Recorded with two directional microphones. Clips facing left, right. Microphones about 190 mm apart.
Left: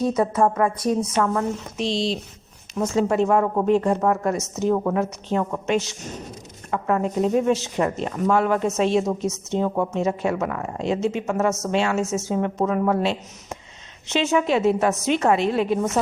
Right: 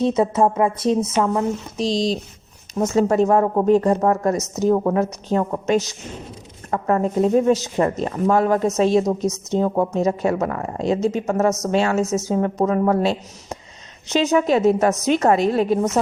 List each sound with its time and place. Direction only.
0.0 s a woman's voice: 25° right (ahead or behind)
1.8 s a woman's voice: 40° right (ahead or behind)